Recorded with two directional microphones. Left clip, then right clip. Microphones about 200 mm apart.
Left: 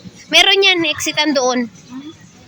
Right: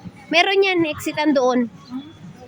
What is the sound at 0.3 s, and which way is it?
A woman's voice, 5° right (ahead or behind).